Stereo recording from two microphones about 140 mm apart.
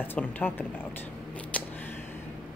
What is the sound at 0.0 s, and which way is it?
Speech, 15° left (ahead or behind).